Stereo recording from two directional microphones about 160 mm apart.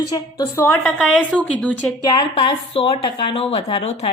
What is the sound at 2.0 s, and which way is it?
A woman's voice, 25° left (ahead or behind).